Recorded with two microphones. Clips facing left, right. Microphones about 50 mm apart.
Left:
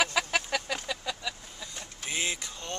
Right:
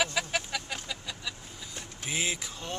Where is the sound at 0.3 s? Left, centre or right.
Left.